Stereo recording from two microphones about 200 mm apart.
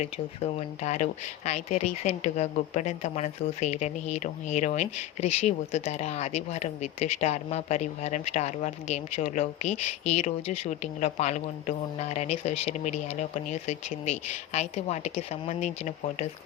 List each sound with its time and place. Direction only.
0.0 s speech: 35° left (ahead or behind)